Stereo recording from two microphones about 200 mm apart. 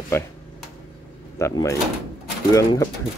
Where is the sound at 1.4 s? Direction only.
15° left (ahead or behind).